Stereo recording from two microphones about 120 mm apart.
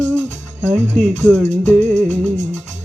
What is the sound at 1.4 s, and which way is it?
Music, 75° right (ahead or behind).